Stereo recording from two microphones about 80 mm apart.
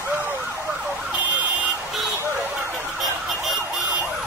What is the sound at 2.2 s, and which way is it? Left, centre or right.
Emergency vehicle, right.